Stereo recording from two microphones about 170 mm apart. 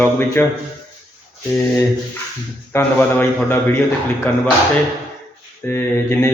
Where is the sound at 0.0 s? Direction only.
10° left (ahead or behind).